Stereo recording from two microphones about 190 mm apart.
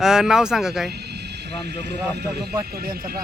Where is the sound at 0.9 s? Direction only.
60° right (ahead or behind).